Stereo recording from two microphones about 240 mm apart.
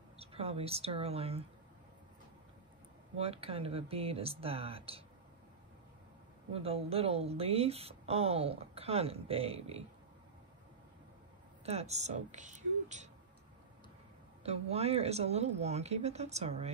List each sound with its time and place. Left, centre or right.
0.2 s speech: right
3.2 s speech: right
6.5 s speech: right
11.6 s speech: right
14.4 s speech: right